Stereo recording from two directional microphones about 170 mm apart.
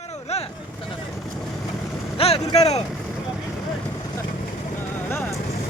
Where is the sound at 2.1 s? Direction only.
35° left (ahead or behind).